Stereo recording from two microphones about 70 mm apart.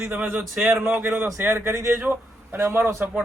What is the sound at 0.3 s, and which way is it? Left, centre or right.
Speech, centre.